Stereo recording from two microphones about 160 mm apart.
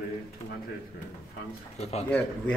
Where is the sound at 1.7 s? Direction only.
40° left (ahead or behind).